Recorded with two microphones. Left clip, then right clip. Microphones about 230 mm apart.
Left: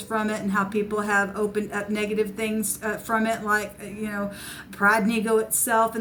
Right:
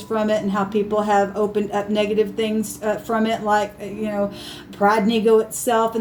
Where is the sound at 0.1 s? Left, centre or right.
Left.